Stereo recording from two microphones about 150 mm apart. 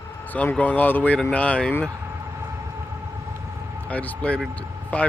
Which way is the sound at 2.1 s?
20° right (ahead or behind).